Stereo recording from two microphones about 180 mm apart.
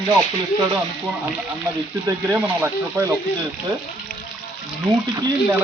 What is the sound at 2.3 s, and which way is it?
Speech, 10° right (ahead or behind).